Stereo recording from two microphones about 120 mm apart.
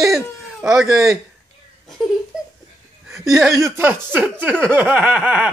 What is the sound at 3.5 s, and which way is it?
Speech, 20° right (ahead or behind).